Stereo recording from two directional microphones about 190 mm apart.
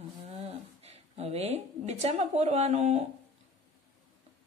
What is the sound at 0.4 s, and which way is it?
A woman's voice, 30° right (ahead or behind).